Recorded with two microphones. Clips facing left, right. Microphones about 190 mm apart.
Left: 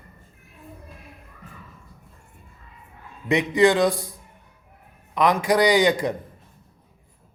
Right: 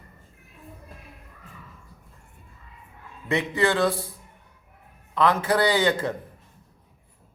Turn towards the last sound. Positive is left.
turn(degrees=15)  # may be behind; listen again after turning